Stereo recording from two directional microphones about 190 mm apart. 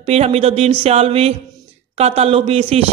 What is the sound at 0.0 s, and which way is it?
A man's voice, 35° right (ahead or behind).